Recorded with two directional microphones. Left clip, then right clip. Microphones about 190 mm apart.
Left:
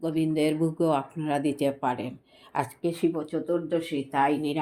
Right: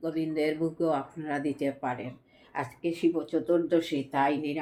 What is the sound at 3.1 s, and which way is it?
Speech, 25° left (ahead or behind).